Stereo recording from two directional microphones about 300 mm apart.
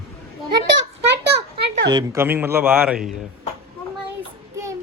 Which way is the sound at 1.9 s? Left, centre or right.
Centre.